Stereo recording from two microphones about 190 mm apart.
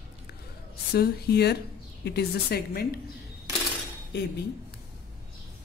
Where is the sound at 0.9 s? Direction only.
55° left (ahead or behind).